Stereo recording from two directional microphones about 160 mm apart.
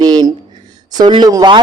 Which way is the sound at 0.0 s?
25° right (ahead or behind).